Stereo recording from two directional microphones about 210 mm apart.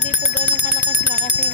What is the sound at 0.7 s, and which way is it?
Speech, 50° left (ahead or behind).